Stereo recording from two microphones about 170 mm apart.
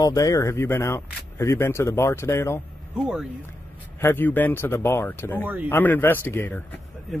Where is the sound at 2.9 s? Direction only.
5° right (ahead or behind).